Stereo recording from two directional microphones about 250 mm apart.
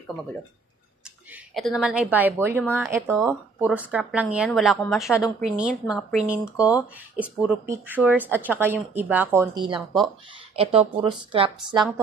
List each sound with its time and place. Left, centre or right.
1.3 s speech: centre
9.8 s speech: centre
10.5 s speech: right